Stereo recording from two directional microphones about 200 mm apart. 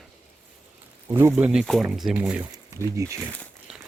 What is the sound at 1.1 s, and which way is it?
Speech, 10° right (ahead or behind).